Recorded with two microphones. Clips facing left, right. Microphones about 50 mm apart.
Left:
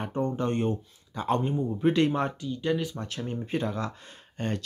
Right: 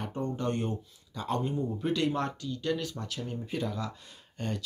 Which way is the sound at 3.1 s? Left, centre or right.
Left.